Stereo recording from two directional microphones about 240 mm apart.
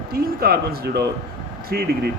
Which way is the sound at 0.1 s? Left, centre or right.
Right.